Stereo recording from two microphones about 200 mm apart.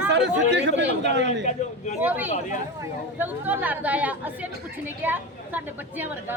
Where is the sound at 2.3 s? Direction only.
40° left (ahead or behind).